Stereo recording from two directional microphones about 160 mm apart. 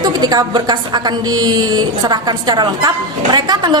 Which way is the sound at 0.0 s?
25° right (ahead or behind).